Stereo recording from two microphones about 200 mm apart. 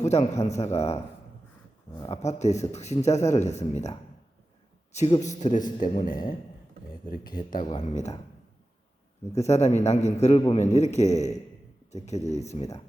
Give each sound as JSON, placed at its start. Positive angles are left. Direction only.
{"t": 0.0, "sound": "a man's voice", "side_deg": 35}
{"t": 2.0, "sound": "a man's voice", "side_deg": 30}
{"t": 7.3, "sound": "speech", "side_deg": 45}
{"t": 7.7, "sound": "speech", "side_deg": 35}
{"t": 9.3, "sound": "speech", "side_deg": 35}